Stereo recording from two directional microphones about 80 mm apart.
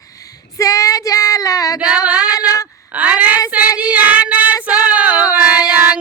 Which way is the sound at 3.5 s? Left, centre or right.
Centre.